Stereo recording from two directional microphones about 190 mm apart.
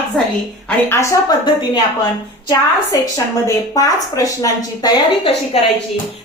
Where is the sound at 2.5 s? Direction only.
20° left (ahead or behind).